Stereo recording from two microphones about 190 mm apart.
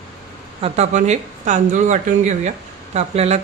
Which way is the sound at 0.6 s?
35° right (ahead or behind).